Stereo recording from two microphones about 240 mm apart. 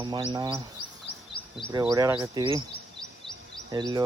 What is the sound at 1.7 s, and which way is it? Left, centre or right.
Speech, centre.